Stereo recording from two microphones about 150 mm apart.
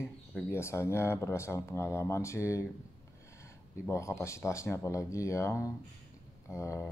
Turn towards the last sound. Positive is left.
turn(degrees=20)  # may be behind; listen again after turning